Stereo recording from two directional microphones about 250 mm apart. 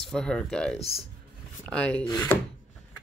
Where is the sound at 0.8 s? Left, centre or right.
Left.